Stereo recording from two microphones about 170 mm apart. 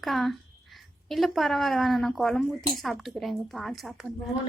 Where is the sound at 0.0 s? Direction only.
Centre (ahead or behind).